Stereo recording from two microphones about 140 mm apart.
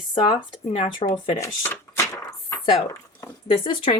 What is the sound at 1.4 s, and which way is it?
Speech, 20° left (ahead or behind).